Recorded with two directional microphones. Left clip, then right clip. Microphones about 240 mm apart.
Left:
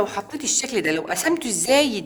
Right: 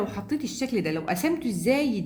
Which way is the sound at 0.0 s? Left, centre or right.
Left.